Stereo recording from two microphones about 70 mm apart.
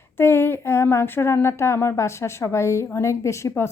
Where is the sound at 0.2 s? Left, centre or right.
Left.